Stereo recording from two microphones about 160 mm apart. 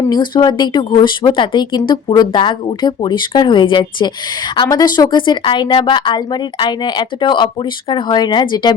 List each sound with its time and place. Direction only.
0.1 s speech: 30° left (ahead or behind)